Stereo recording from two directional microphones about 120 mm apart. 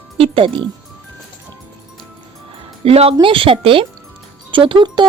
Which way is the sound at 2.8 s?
55° right (ahead or behind).